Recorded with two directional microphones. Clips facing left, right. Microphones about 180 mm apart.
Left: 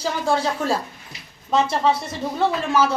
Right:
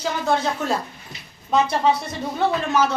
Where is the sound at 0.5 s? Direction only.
10° left (ahead or behind).